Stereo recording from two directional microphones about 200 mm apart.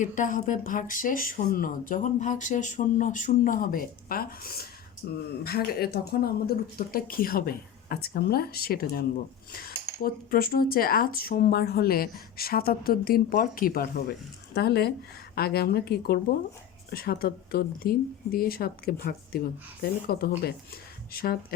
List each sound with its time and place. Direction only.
0.0 s speech: 40° left (ahead or behind)